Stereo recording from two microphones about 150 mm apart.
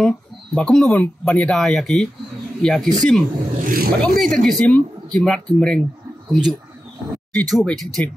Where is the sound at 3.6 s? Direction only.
75° right (ahead or behind).